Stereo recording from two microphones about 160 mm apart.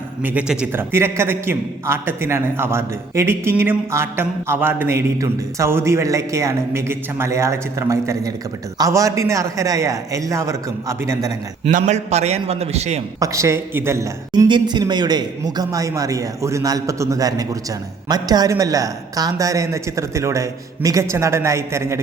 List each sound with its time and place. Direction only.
0.2 s a man's voice: 10° right (ahead or behind)
11.7 s a man's voice: 45° right (ahead or behind)
13.1 s a woman's voice: 20° right (ahead or behind)